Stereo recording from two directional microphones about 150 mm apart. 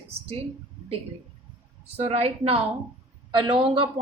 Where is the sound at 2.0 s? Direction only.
45° right (ahead or behind).